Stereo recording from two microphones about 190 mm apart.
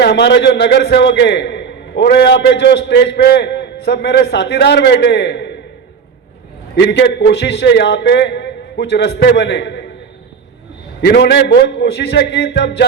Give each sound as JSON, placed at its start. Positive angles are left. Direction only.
{"t": 0.0, "sound": "a man's voice", "side_deg": 65}
{"t": 6.7, "sound": "a man's voice", "side_deg": 65}
{"t": 11.0, "sound": "a man's voice", "side_deg": 60}